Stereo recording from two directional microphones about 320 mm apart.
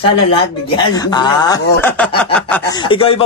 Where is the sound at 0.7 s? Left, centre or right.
Centre.